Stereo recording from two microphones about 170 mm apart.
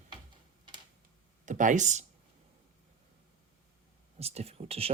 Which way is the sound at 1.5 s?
50° right (ahead or behind).